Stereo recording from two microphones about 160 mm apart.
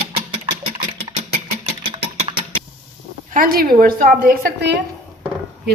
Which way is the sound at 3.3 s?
65° right (ahead or behind).